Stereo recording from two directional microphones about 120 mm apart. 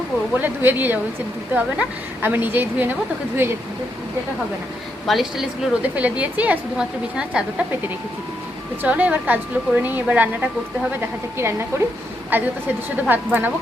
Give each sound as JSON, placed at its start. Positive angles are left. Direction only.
{"t": 0.3, "sound": "a woman's voice", "side_deg": -15}
{"t": 5.0, "sound": "speech", "side_deg": 0}
{"t": 6.0, "sound": "a woman's voice", "side_deg": -10}
{"t": 8.8, "sound": "a woman's voice", "side_deg": -10}